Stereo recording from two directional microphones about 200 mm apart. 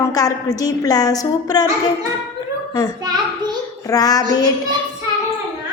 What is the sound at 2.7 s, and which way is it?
Speech, 15° left (ahead or behind).